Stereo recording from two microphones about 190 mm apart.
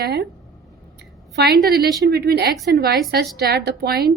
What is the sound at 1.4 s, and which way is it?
A woman's voice, 55° right (ahead or behind).